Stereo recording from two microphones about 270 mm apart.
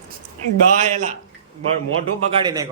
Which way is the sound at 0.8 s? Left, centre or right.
Right.